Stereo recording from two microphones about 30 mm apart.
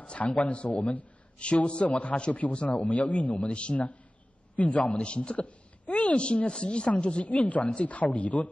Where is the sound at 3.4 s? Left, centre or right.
Left.